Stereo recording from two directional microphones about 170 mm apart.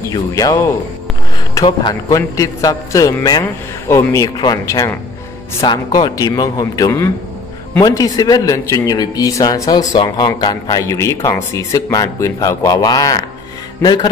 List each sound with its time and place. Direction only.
0.1 s speech: 20° left (ahead or behind)
1.7 s speech: 25° left (ahead or behind)